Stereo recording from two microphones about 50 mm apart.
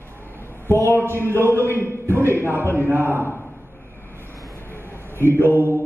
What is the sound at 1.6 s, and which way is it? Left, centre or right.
A man's voice, right.